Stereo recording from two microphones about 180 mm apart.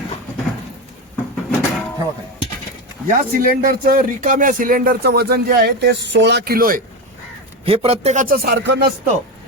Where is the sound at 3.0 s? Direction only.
50° right (ahead or behind).